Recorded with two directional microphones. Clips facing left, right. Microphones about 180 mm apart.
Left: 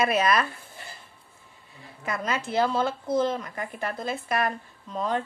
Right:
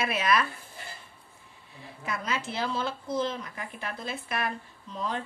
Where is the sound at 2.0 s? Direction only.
50° left (ahead or behind).